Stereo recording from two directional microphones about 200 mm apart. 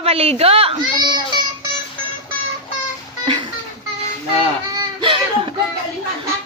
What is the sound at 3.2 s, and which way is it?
Music, 25° right (ahead or behind).